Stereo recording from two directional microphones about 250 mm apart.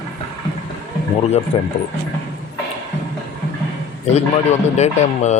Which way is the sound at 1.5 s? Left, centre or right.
Left.